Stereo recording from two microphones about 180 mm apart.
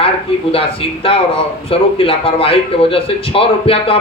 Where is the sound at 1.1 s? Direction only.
30° left (ahead or behind).